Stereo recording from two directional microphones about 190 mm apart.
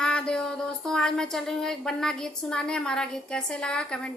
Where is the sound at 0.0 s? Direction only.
5° left (ahead or behind).